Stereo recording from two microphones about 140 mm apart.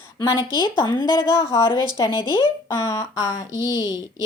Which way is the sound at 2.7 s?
20° left (ahead or behind).